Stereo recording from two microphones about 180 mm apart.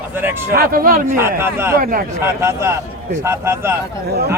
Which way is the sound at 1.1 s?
15° right (ahead or behind).